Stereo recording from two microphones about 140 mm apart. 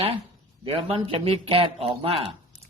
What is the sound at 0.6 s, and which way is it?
A man's voice, 40° right (ahead or behind).